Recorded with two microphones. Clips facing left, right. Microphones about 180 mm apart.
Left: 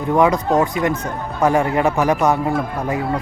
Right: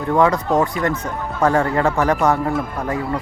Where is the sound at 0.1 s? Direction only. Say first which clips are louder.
Left 1 dB; 15° left (ahead or behind).